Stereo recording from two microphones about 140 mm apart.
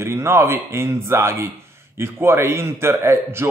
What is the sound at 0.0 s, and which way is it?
A man's voice, 20° right (ahead or behind).